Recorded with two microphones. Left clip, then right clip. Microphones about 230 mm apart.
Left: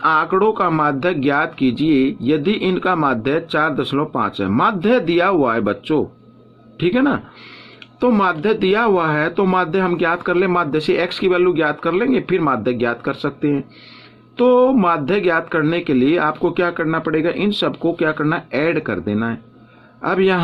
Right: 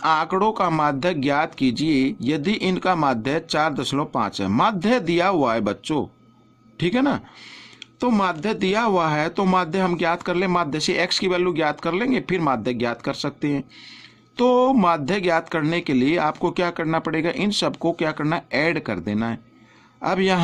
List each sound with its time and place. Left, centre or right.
0.0 s speech: right